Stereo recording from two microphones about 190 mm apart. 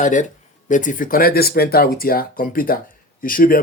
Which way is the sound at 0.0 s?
40° left (ahead or behind).